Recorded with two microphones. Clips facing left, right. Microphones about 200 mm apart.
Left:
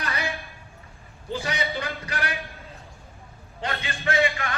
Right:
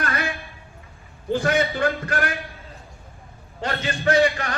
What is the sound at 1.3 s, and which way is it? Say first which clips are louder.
Speech: right 9 dB; 50° right (ahead or behind).